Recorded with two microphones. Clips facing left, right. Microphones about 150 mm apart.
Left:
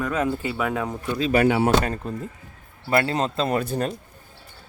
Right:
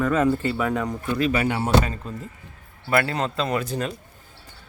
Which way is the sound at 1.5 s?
75° left (ahead or behind).